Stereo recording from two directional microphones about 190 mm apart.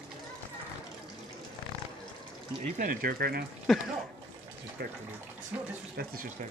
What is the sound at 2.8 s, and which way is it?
Speech, 50° right (ahead or behind).